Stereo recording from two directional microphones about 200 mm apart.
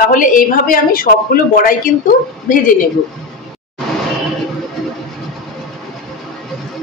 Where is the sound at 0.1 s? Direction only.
40° left (ahead or behind).